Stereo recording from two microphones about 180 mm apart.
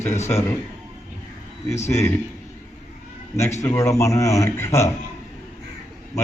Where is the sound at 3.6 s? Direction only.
15° left (ahead or behind).